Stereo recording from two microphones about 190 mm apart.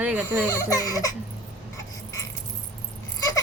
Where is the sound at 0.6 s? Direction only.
20° left (ahead or behind).